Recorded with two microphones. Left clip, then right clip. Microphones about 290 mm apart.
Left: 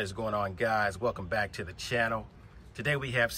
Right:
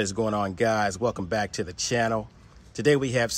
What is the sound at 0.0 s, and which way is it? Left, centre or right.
Speech, right.